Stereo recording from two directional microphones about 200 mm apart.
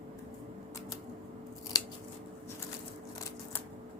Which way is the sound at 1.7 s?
20° left (ahead or behind).